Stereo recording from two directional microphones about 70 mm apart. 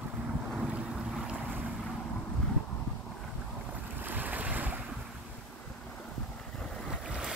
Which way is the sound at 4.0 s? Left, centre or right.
Right.